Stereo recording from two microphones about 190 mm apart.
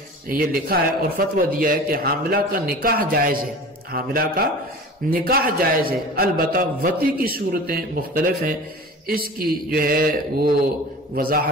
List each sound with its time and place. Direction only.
0.3 s a man's voice: 50° right (ahead or behind)